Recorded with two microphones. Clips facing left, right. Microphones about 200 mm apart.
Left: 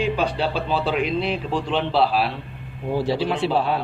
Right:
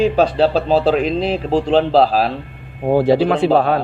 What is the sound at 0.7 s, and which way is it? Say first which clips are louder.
A man's voice: right 7 dB; 40° right (ahead or behind).